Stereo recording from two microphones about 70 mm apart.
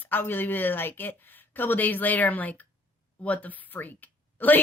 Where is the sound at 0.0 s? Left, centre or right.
Left.